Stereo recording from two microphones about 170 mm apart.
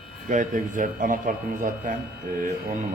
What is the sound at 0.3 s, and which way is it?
A man's voice, 50° right (ahead or behind).